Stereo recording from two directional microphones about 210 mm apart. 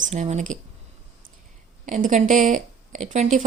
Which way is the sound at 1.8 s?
35° right (ahead or behind).